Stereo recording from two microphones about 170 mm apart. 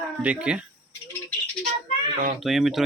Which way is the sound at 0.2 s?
5° right (ahead or behind).